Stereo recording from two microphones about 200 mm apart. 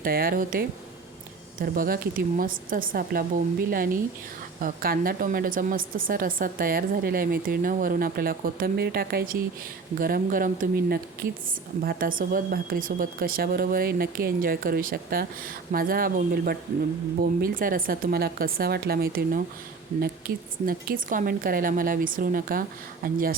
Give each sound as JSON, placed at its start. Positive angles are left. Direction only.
{"t": 0.0, "sound": "a woman's voice", "side_deg": -45}
{"t": 4.6, "sound": "a woman's voice", "side_deg": -45}